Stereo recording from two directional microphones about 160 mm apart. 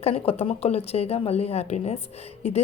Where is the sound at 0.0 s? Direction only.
40° left (ahead or behind).